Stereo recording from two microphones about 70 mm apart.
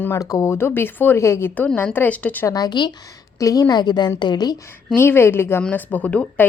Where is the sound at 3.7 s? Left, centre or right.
Left.